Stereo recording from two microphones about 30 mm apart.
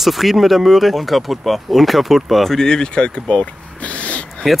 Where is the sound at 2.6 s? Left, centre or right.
Left.